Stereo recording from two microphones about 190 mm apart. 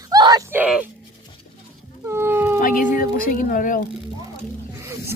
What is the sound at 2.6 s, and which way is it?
Speech, 45° left (ahead or behind).